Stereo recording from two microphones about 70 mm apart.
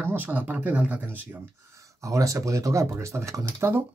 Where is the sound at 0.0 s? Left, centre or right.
Right.